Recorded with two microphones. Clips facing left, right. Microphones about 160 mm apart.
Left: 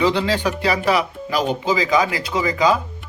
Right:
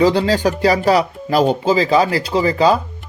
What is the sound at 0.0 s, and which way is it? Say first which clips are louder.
Speech: right 5 dB; 35° right (ahead or behind).